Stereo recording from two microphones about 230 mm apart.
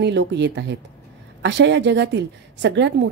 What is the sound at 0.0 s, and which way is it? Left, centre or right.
A woman's voice, right.